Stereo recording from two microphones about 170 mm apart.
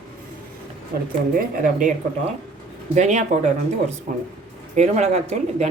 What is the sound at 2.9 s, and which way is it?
Speech, 45° right (ahead or behind).